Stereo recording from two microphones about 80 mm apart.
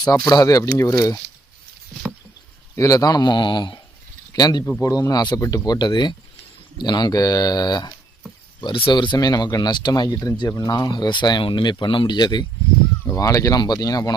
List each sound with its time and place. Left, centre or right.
0.0 s speech: left
2.7 s speech: left
4.4 s speech: left
8.6 s speech: left
13.1 s speech: left